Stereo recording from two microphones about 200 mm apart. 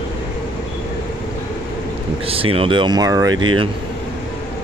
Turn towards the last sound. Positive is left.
turn(degrees=-25)  # may be behind; listen again after turning